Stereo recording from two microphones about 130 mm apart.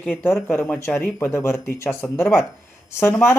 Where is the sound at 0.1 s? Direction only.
15° left (ahead or behind).